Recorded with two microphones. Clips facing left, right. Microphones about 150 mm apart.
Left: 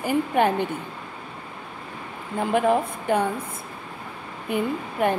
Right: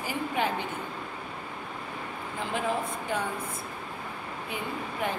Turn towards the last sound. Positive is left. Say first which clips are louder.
# left 8 dB
turn(degrees=55)  # may be behind; listen again after turning